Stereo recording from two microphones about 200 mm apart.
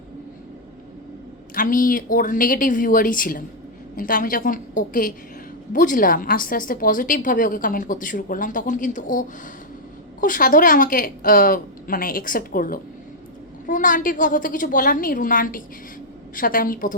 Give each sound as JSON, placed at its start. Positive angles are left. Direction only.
{"t": 1.5, "sound": "a woman's voice", "side_deg": 45}